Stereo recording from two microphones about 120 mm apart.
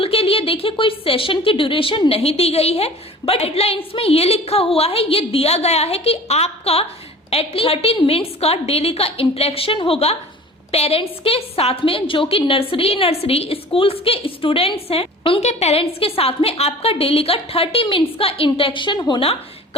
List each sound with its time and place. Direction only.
0.0 s a woman's voice: 55° left (ahead or behind)